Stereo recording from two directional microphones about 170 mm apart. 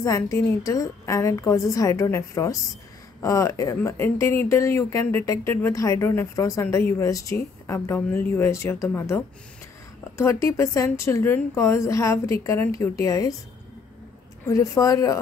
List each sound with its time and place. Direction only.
0.0 s a woman's voice: 20° left (ahead or behind)
14.4 s a woman's voice: 20° left (ahead or behind)